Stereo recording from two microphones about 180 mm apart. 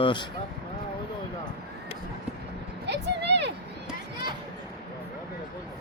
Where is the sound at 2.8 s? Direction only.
70° right (ahead or behind).